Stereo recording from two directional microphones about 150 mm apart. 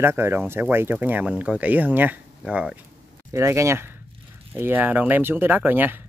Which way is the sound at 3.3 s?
20° right (ahead or behind).